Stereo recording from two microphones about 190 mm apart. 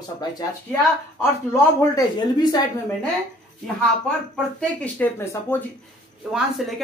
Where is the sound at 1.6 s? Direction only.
20° left (ahead or behind).